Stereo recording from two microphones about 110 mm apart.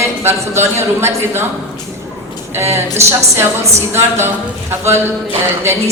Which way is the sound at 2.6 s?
25° right (ahead or behind).